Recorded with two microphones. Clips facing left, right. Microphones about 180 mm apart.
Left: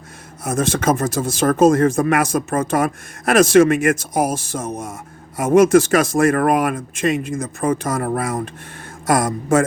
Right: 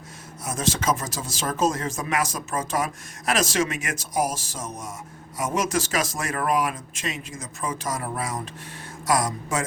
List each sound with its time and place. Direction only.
0.4 s speech: 55° left (ahead or behind)